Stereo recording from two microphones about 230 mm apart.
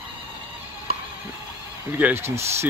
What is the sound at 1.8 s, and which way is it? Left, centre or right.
Speech, centre.